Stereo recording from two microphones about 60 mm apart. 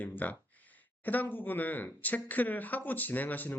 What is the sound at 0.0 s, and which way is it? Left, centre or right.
Speech, left.